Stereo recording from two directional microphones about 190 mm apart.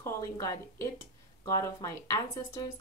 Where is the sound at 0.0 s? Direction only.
15° left (ahead or behind).